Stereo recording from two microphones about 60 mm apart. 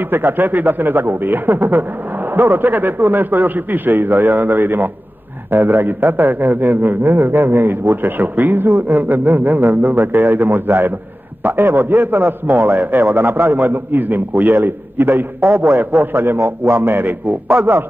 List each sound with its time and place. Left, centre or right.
0.1 s a man's voice: right
12.2 s a man's voice: right
13.1 s a man's voice: right
15.4 s a man's voice: right
15.8 s a man's voice: right
16.3 s a man's voice: right
16.8 s a man's voice: right
17.5 s a man's voice: right